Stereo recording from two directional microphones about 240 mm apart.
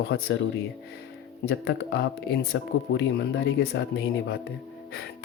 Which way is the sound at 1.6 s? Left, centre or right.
Left.